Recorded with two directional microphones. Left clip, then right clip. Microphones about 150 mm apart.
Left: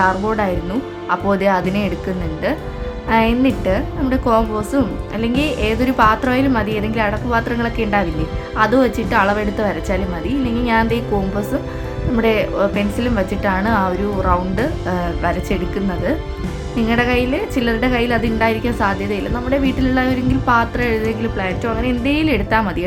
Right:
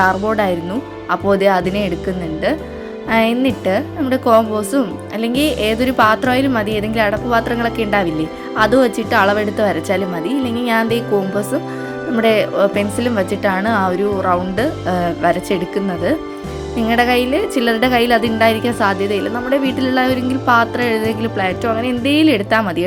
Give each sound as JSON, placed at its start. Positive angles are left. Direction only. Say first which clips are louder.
{"t": 0.0, "sound": "a woman's voice", "louder": "right 2 dB", "side_deg": -30}
{"t": 3.1, "sound": "a woman's voice", "louder": "even", "side_deg": -25}